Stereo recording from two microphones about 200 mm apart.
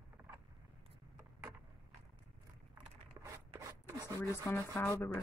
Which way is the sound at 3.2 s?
15° right (ahead or behind).